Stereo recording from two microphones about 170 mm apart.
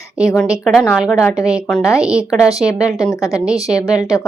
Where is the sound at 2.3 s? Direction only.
20° left (ahead or behind).